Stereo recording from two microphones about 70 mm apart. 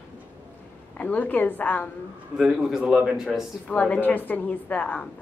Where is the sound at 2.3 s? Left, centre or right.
Centre.